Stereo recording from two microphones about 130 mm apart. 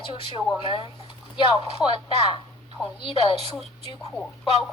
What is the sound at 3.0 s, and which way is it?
Speech, 45° left (ahead or behind).